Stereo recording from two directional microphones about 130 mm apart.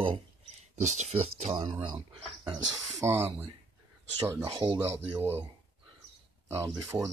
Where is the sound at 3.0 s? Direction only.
20° right (ahead or behind).